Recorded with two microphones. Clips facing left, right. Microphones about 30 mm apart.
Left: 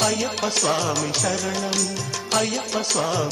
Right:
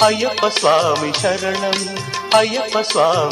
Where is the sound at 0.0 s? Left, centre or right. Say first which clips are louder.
Right 8 dB; right.